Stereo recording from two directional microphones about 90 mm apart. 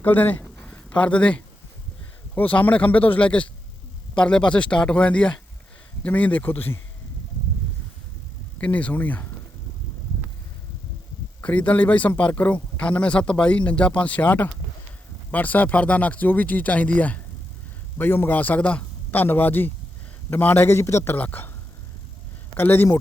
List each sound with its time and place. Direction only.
0.0 s a man's voice: 20° left (ahead or behind)
0.5 s a sound: 10° left (ahead or behind)
2.3 s a man's voice: 20° left (ahead or behind)
8.5 s speech: 15° left (ahead or behind)
11.4 s a man's voice: 15° left (ahead or behind)
22.5 s a man's voice: 20° left (ahead or behind)